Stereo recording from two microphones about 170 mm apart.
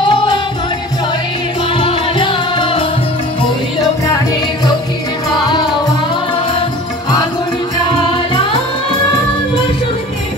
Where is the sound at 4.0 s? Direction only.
25° left (ahead or behind).